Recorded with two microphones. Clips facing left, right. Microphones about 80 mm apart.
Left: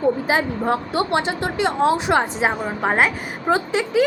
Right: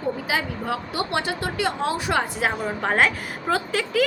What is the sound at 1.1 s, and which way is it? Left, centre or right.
A woman's voice, left.